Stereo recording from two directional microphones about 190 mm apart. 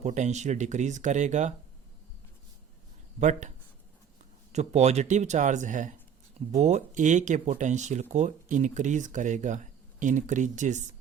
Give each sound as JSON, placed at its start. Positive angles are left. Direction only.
{"t": 0.0, "sound": "speech", "side_deg": -35}
{"t": 3.2, "sound": "speech", "side_deg": -40}
{"t": 4.5, "sound": "speech", "side_deg": -35}